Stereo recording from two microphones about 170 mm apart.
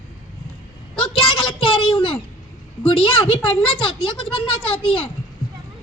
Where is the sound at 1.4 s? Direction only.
30° left (ahead or behind).